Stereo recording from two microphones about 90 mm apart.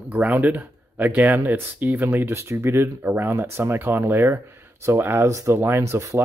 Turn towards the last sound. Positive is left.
turn(degrees=-30)  # may be behind; listen again after turning